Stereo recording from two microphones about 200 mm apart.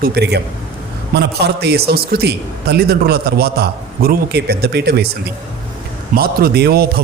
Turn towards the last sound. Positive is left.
turn(degrees=-55)  # may be behind; listen again after turning